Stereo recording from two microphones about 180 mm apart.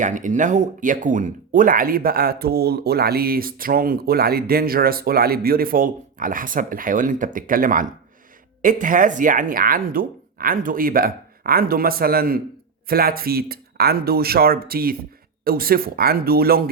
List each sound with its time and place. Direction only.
0.0 s speech: 45° right (ahead or behind)